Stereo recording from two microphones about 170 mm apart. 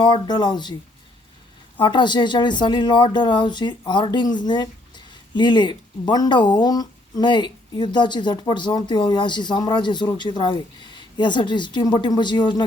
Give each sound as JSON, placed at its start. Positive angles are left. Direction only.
{"t": 0.0, "sound": "speech", "side_deg": 25}
{"t": 1.8, "sound": "speech", "side_deg": 25}